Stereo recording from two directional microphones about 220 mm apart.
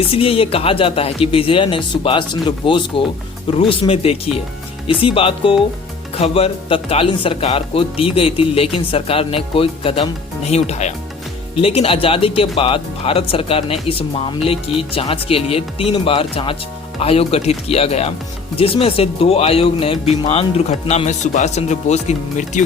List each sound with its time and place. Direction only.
0.1 s speech: 25° left (ahead or behind)